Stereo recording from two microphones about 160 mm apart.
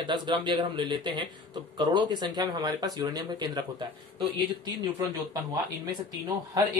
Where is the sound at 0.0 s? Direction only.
30° right (ahead or behind).